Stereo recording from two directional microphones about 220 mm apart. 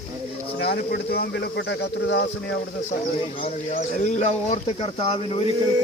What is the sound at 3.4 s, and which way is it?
Speech, 30° left (ahead or behind).